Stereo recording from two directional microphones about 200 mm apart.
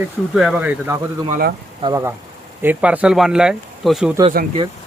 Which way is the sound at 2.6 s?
5° right (ahead or behind).